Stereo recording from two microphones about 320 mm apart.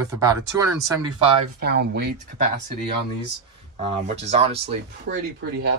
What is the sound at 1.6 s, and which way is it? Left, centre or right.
Speech, right.